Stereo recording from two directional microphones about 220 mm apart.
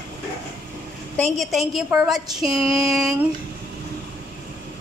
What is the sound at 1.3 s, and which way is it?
A woman's voice, centre (ahead or behind).